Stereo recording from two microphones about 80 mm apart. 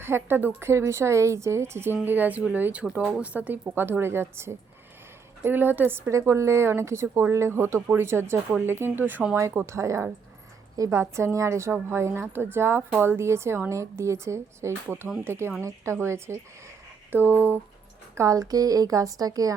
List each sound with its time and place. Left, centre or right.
0.0 s a woman's voice: right
6.1 s a woman's voice: right
18.1 s a woman's voice: right